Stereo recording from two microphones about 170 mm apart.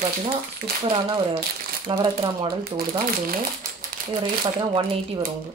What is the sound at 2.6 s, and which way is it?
Speech, 60° right (ahead or behind).